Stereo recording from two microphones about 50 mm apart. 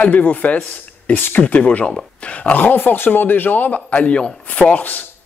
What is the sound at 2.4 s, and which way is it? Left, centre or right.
A man's voice, left.